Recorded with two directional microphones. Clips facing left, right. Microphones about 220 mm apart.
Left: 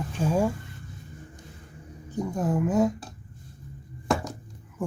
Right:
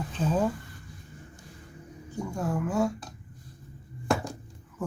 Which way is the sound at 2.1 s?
20° left (ahead or behind).